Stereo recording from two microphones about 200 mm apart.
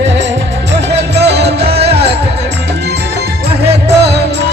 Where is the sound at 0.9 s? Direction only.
60° right (ahead or behind).